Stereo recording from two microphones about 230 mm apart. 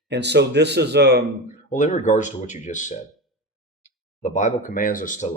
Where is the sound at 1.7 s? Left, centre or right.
Left.